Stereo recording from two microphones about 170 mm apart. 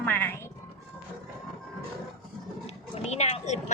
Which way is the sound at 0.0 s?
10° left (ahead or behind).